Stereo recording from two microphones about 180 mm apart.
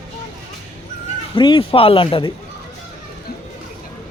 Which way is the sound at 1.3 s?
25° left (ahead or behind).